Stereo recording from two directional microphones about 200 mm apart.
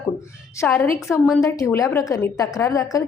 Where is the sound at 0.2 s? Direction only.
15° left (ahead or behind).